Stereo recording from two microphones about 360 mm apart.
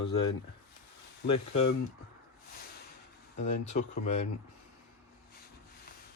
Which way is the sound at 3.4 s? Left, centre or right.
Centre.